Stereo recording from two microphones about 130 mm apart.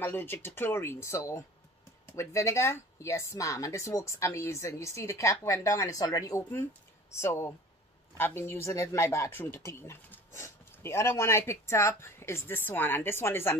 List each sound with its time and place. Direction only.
0.0 s speech: 15° left (ahead or behind)